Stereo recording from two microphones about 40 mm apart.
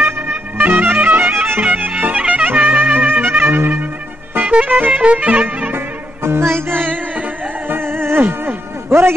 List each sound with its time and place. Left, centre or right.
0.6 s music: right
1.3 s music: right
1.6 s music: right
4.4 s music: right
6.2 s music: right
6.8 s music: right